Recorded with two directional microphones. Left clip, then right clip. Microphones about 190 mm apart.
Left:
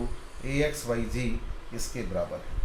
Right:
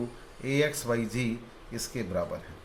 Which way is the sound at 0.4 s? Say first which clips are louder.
Right 1 dB; 35° right (ahead or behind).